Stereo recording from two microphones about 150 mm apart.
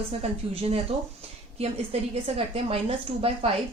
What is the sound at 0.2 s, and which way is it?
A woman's voice, 40° right (ahead or behind).